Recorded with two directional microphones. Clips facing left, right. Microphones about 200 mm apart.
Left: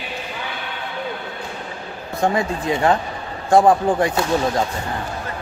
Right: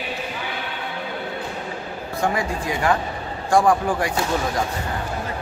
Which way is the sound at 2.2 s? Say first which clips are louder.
Left 4 dB; 25° left (ahead or behind).